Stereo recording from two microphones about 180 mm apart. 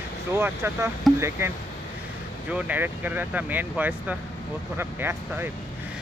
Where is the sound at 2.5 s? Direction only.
10° right (ahead or behind).